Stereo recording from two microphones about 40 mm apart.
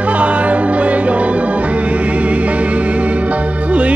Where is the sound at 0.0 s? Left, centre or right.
Right.